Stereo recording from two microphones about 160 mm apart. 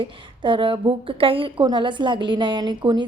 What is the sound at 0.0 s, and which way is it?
A woman's voice, 30° right (ahead or behind).